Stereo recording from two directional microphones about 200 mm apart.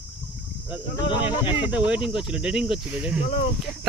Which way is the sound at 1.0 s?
25° left (ahead or behind).